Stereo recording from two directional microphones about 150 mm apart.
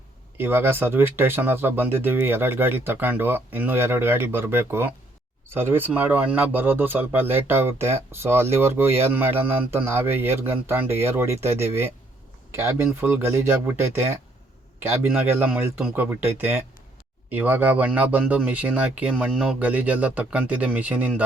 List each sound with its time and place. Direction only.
0.3 s speech: 15° right (ahead or behind)